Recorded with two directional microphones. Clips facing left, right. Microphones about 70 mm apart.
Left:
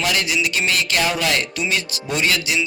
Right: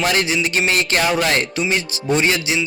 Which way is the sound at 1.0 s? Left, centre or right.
Right.